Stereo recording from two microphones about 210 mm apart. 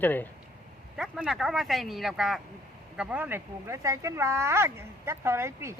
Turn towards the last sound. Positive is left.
turn(degrees=-10)  # may be behind; listen again after turning